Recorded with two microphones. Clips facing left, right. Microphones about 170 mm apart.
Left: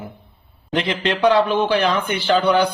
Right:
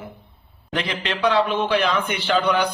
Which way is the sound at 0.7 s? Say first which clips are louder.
Left 5 dB; 30° left (ahead or behind).